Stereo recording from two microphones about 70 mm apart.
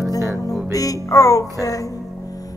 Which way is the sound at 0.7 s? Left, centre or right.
Left.